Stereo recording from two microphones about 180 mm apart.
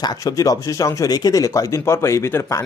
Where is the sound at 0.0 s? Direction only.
20° left (ahead or behind).